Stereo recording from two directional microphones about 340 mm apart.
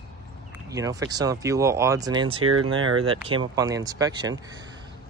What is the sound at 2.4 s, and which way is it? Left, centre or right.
Speech, right.